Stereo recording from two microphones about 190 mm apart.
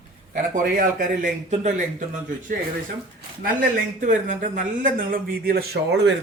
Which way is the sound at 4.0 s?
40° right (ahead or behind).